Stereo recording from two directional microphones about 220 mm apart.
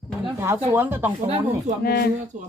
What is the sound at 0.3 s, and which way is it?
Speech, 10° right (ahead or behind).